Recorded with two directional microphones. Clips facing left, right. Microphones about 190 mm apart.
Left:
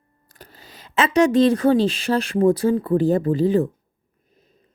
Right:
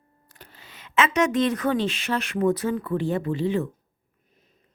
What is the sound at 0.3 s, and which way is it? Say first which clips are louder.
Speech: left 4 dB; 40° left (ahead or behind).